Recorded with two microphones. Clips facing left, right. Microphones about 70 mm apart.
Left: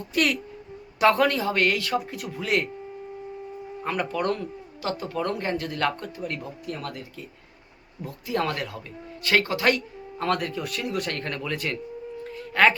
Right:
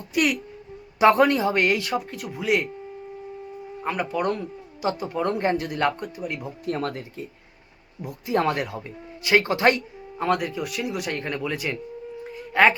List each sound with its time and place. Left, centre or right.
0.1 s speech: centre
0.9 s speech: right
2.0 s speech: centre
3.8 s speech: centre
6.7 s speech: right
8.0 s speech: right
10.2 s speech: centre
12.2 s a sound: centre